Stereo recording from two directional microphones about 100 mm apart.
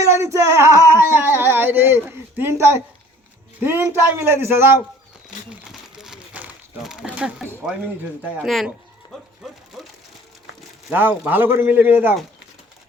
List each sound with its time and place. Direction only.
0.0 s male singing: 30° right (ahead or behind)
1.1 s speech: 20° right (ahead or behind)
6.0 s a sound: 5° right (ahead or behind)
6.8 s speech: 5° right (ahead or behind)
8.4 s speech: centre (ahead or behind)
11.2 s speech: 20° right (ahead or behind)